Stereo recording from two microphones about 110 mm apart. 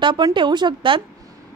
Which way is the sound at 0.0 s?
45° right (ahead or behind).